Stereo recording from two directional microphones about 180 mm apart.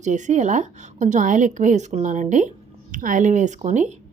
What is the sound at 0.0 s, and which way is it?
A woman's voice, 40° right (ahead or behind).